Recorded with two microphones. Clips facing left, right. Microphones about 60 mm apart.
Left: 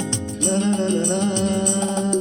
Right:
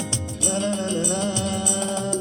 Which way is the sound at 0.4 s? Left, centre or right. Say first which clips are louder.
Left 4 dB; left.